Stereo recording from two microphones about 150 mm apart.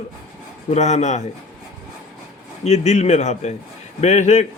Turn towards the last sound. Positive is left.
turn(degrees=50)  # may be behind; listen again after turning